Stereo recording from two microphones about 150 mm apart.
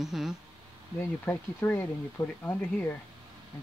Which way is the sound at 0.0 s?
Centre (ahead or behind).